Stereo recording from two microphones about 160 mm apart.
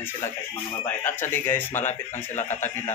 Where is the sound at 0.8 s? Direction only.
10° left (ahead or behind).